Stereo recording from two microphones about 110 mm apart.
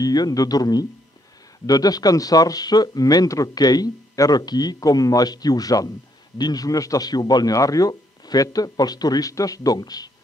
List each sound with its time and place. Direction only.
0.0 s speech: 35° left (ahead or behind)